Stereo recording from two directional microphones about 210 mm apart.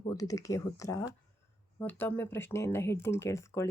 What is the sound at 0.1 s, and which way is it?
Speech, 15° left (ahead or behind).